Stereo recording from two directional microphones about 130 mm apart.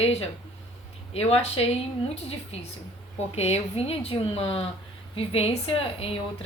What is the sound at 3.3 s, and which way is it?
Speech, 55° left (ahead or behind).